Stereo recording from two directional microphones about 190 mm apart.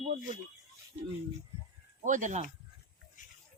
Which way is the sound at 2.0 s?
40° right (ahead or behind).